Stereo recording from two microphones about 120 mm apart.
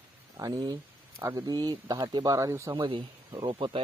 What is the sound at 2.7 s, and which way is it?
Speech, 45° right (ahead or behind).